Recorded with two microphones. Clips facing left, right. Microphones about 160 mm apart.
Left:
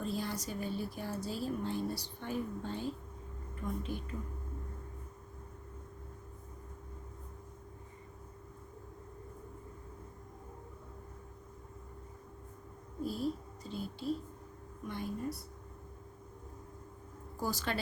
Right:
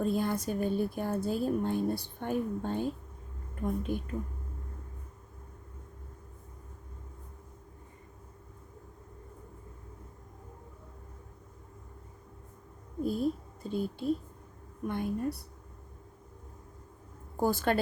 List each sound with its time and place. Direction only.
0.0 s speech: 55° right (ahead or behind)
13.1 s a woman's voice: 50° right (ahead or behind)
17.3 s speech: 55° right (ahead or behind)